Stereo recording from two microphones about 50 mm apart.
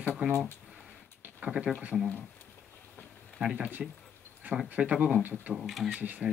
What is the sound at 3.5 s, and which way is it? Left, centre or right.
Speech, right.